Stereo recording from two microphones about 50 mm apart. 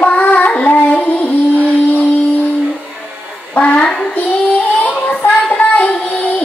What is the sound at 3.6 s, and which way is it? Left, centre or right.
Child singing, left.